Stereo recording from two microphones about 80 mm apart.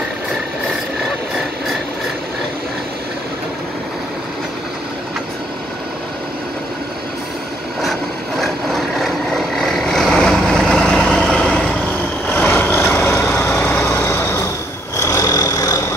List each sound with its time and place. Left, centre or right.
8.4 s vehicle: centre
12.4 s vehicle: left